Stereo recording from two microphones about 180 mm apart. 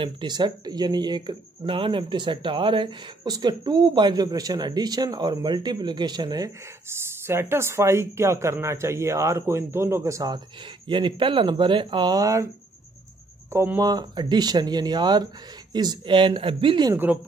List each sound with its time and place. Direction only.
0.0 s speech: 25° right (ahead or behind)
13.5 s speech: 15° right (ahead or behind)